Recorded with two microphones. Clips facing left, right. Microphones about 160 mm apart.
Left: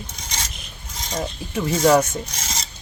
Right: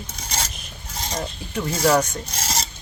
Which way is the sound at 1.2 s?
5° left (ahead or behind).